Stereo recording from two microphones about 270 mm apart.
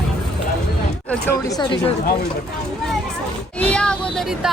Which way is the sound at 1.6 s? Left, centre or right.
Centre.